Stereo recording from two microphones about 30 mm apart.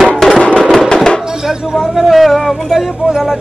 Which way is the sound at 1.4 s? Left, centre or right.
Centre.